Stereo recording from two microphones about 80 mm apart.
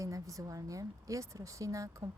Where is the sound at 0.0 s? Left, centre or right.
Right.